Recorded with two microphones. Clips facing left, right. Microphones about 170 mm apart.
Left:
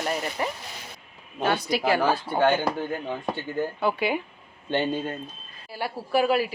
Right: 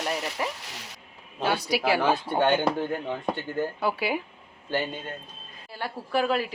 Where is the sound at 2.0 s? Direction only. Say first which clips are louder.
Left 1 dB; centre (ahead or behind).